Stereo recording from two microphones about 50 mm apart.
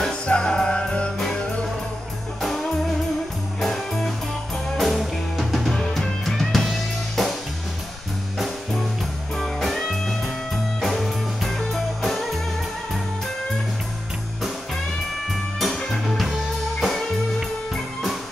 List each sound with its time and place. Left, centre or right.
0.1 s music: centre
2.4 s music: centre
9.4 s music: centre
15.2 s music: centre